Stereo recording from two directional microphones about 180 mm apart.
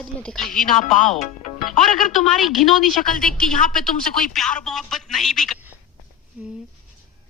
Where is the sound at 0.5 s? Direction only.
50° left (ahead or behind).